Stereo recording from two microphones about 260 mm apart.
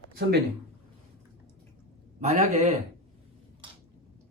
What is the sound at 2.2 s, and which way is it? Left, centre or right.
Speech, right.